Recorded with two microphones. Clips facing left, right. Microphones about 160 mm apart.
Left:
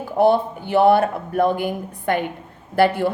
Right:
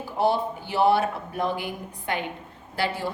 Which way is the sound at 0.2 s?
55° left (ahead or behind).